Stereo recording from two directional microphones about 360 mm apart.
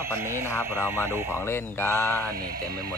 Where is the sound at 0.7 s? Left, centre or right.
Centre.